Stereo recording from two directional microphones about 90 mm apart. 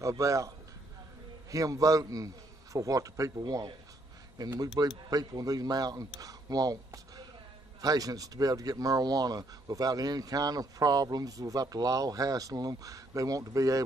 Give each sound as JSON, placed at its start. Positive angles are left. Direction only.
{"t": 0.0, "sound": "a man's voice", "side_deg": -35}
{"t": 1.5, "sound": "a man's voice", "side_deg": -40}